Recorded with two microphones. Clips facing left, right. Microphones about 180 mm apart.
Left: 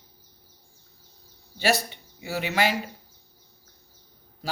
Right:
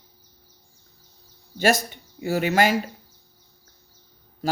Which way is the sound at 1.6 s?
45° right (ahead or behind).